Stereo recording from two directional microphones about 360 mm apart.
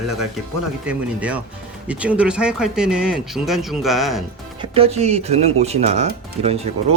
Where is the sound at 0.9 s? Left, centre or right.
Centre.